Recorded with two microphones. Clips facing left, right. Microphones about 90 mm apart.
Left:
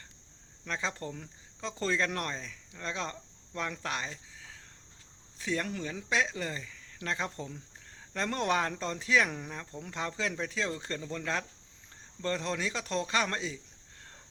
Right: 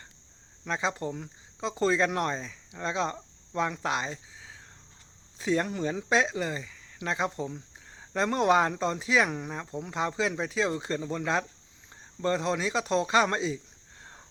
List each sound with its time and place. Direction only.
0.6 s speech: 20° right (ahead or behind)